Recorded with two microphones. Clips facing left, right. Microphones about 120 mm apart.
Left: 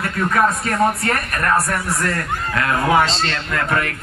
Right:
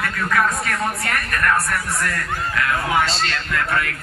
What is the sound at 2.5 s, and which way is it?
A man's voice, 35° left (ahead or behind).